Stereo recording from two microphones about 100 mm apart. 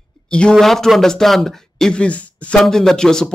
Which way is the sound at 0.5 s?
5° left (ahead or behind).